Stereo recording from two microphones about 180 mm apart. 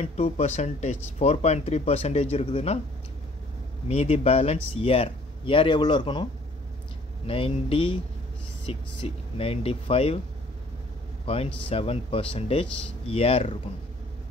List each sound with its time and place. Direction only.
0.0 s speech: 40° left (ahead or behind)
3.9 s speech: 35° left (ahead or behind)
7.2 s speech: 30° left (ahead or behind)
11.2 s speech: 35° left (ahead or behind)